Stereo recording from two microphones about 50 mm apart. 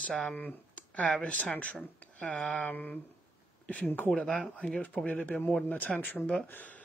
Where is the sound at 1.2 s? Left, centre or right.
Left.